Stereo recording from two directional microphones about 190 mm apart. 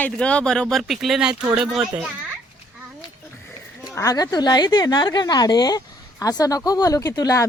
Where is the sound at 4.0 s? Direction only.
20° left (ahead or behind).